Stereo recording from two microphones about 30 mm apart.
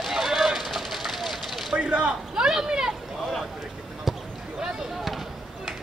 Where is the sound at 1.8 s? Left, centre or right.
Right.